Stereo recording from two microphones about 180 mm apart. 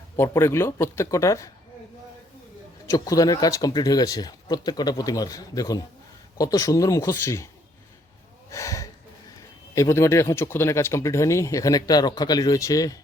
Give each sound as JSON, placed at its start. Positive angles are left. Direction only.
{"t": 0.2, "sound": "speech", "side_deg": 15}
{"t": 2.8, "sound": "speech", "side_deg": 15}
{"t": 8.4, "sound": "speech", "side_deg": 15}